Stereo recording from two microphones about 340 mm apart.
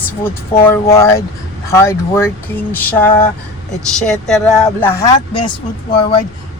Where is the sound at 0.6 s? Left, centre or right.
Centre.